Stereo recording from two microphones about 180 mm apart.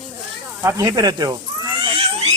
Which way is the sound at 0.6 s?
20° right (ahead or behind).